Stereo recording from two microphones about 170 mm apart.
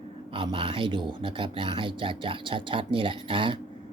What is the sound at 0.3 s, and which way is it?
Speech, 30° right (ahead or behind).